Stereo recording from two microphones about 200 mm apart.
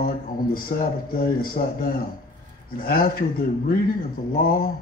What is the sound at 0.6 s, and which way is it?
A man's voice, 45° left (ahead or behind).